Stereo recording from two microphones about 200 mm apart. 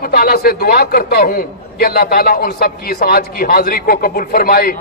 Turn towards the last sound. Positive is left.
turn(degrees=50)  # may be behind; listen again after turning